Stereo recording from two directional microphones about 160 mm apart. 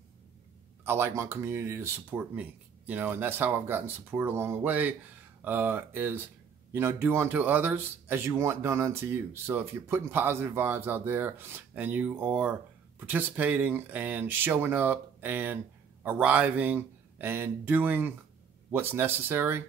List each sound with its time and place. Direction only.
0.8 s speech: 15° right (ahead or behind)